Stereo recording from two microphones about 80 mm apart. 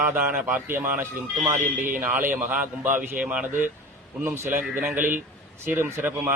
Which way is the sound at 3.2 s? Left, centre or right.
Centre.